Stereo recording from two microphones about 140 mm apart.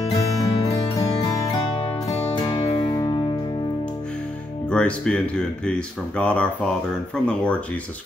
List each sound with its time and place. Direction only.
0.1 s music: 30° left (ahead or behind)
4.6 s speech: 5° left (ahead or behind)